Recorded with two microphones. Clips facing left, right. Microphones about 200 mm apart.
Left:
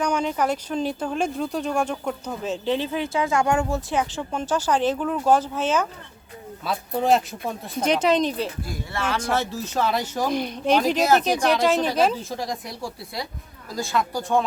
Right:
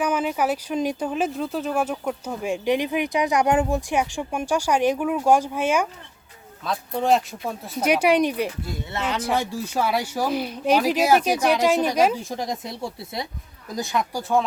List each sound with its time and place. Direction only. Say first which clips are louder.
0.0 s speech: even; 5° right (ahead or behind)
6.7 s speech: even; 5° left (ahead or behind); by 14.2 s 20° right (ahead or behind)
14.2 s speech: right 1 dB; 5° right (ahead or behind)